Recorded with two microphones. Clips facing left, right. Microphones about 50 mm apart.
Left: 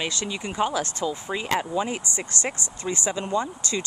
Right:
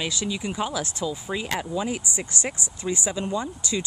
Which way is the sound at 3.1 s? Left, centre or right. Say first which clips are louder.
Left 2 dB; left.